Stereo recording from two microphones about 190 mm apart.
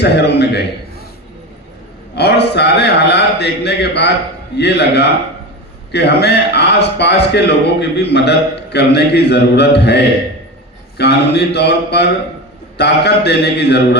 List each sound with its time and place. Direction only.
0.0 s a man's voice: 60° left (ahead or behind)
2.1 s a man's voice: 60° left (ahead or behind)